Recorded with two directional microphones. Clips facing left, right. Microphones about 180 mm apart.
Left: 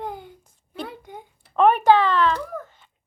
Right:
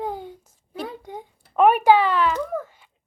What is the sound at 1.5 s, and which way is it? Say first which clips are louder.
Speech: even; 10° right (ahead or behind).